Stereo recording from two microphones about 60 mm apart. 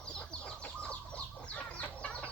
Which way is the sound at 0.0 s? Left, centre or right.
Centre.